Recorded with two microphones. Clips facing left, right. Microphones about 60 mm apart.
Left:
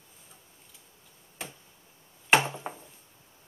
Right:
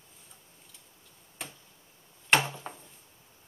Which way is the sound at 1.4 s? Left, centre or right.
Centre.